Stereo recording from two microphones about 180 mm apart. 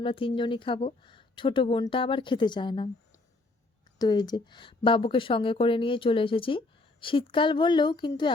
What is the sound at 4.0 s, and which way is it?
Speech, 25° left (ahead or behind).